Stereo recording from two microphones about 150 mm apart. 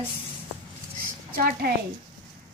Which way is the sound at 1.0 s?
80° right.